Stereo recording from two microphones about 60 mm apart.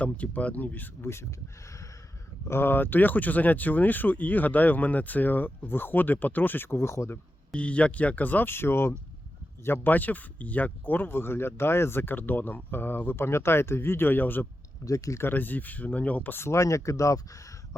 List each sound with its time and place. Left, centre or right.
0.0 s speech: left
1.0 s speech: left
2.5 s speech: left
7.5 s speech: left
14.8 s speech: left
15.2 s speech: left
16.4 s speech: left